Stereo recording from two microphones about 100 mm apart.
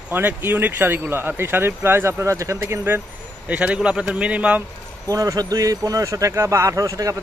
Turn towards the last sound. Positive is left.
turn(degrees=-35)  # may be behind; listen again after turning